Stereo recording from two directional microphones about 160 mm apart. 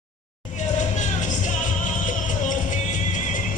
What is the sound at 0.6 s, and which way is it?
Music, 50° left (ahead or behind).